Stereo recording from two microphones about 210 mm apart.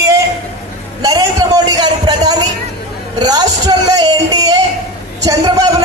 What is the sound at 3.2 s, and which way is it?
Music, 20° right (ahead or behind).